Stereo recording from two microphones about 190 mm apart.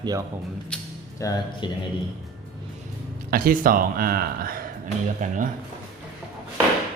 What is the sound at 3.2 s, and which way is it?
Speech, 50° right (ahead or behind).